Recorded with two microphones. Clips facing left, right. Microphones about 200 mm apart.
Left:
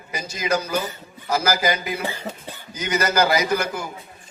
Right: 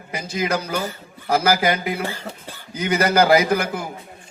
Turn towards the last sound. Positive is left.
turn(degrees=-55)  # may be behind; listen again after turning